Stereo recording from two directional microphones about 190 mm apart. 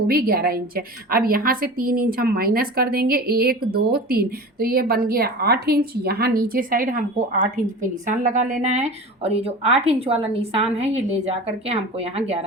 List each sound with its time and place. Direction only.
0.1 s a woman's voice: 50° right (ahead or behind); by 12.2 s 30° right (ahead or behind)